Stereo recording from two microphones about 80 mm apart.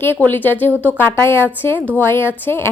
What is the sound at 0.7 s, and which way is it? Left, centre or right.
Speech, right.